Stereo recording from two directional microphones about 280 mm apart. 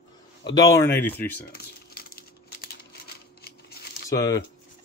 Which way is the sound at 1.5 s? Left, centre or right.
Left.